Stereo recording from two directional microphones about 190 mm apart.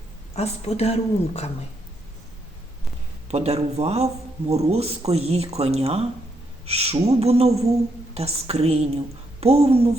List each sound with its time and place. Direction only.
0.3 s a woman's voice: 35° left (ahead or behind)
3.2 s a man's voice: 35° right (ahead or behind)